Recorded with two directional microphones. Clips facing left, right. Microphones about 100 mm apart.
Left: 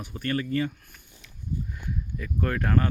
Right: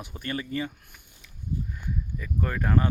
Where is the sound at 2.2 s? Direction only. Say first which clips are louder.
Left 2 dB; 5° right (ahead or behind).